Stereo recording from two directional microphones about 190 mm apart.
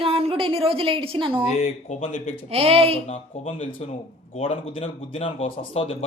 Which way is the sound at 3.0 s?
35° left (ahead or behind).